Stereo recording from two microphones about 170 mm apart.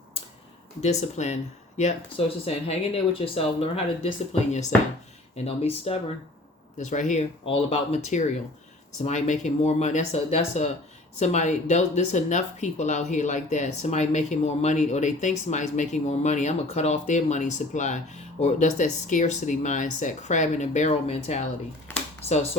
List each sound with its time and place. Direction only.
0.8 s speech: 40° left (ahead or behind)
6.7 s speech: 45° left (ahead or behind)